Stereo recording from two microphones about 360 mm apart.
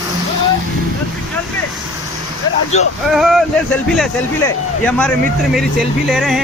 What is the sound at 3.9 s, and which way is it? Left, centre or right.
A man's voice, centre.